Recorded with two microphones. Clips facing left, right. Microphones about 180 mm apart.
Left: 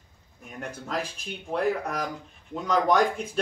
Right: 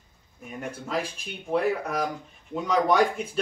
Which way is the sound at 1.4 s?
Centre (ahead or behind).